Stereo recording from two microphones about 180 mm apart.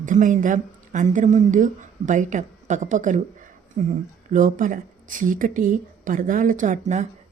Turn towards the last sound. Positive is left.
turn(degrees=-40)  # may be behind; listen again after turning